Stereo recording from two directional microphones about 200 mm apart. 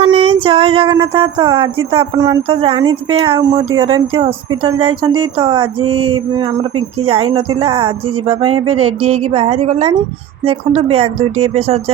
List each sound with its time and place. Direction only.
0.0 s speech: 30° right (ahead or behind)